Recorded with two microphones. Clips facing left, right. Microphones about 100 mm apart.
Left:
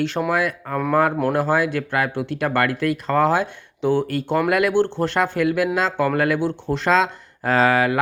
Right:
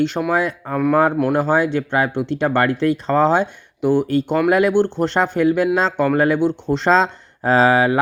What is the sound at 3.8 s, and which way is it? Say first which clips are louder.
Speech: right 3 dB; 10° right (ahead or behind).